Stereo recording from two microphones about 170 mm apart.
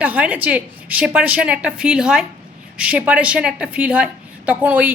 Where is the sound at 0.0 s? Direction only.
10° right (ahead or behind).